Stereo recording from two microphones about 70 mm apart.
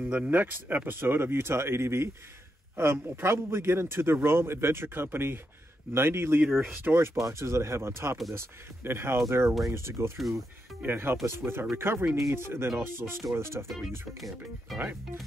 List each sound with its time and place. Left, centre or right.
0.0 s speech: centre
0.3 s a man's voice: right
6.4 s speech: centre
6.7 s a man's voice: right
13.7 s speech: centre